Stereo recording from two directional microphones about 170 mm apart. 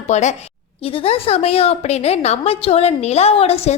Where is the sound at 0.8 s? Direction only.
35° left (ahead or behind).